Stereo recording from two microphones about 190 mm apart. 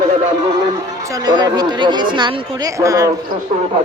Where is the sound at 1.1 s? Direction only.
20° right (ahead or behind).